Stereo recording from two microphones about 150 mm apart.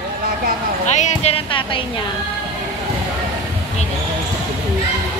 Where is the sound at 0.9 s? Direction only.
50° left (ahead or behind); by 1.8 s 35° left (ahead or behind).